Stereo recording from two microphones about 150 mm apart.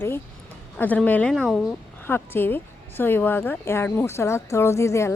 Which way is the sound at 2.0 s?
15° left (ahead or behind).